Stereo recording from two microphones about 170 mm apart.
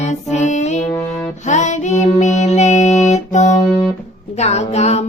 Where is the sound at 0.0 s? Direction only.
40° left (ahead or behind).